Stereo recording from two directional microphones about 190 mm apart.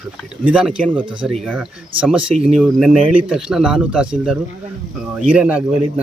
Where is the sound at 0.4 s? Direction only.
5° right (ahead or behind).